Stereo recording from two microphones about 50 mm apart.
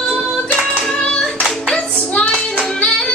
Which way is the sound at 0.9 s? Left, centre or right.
Centre.